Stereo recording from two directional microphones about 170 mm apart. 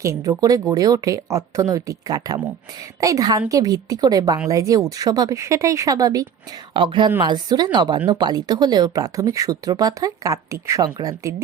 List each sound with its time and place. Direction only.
0.0 s a woman's voice: 20° right (ahead or behind)